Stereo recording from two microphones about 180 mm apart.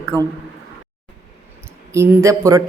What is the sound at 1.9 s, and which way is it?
Speech, 15° right (ahead or behind).